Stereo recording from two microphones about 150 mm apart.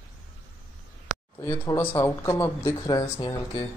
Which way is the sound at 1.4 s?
20° left (ahead or behind).